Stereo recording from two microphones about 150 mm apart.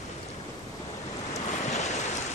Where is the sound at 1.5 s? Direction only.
50° left (ahead or behind).